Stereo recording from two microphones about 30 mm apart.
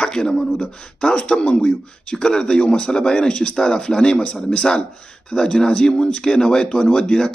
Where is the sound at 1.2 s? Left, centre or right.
Left.